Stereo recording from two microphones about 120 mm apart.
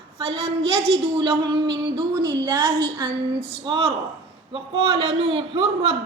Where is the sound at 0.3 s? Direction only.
55° right (ahead or behind).